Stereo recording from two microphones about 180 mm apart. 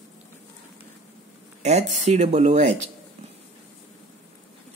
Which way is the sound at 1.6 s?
40° right (ahead or behind).